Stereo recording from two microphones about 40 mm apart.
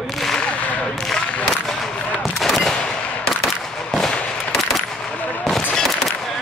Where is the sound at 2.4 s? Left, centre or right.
Centre.